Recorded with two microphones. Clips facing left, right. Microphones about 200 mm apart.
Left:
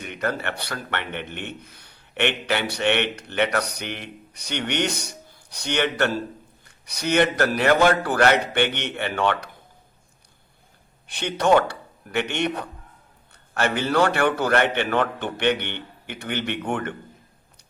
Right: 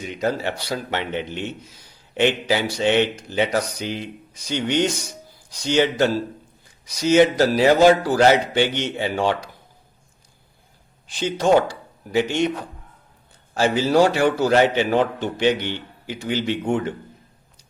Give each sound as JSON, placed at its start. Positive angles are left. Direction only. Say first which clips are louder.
{"t": 0.0, "sound": "speech", "louder": "right 4 dB", "side_deg": 60}
{"t": 11.0, "sound": "speech", "louder": "right 2 dB", "side_deg": 65}
{"t": 13.5, "sound": "speech", "louder": "right 4 dB", "side_deg": 60}